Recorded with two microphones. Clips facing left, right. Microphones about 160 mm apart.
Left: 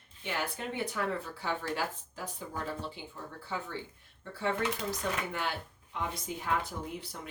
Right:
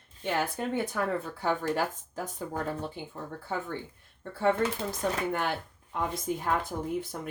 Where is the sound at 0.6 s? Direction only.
45° right (ahead or behind).